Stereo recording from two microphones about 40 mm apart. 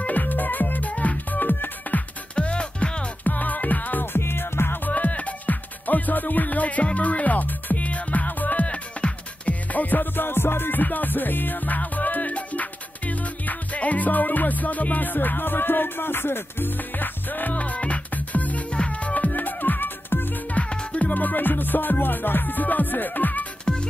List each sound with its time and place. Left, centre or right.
0.0 s music: left
2.3 s music: left
3.3 s music: left
4.0 s music: left
4.8 s music: left
10.8 s music: left
18.7 s music: left
20.5 s music: left
21.1 s music: left
23.6 s music: left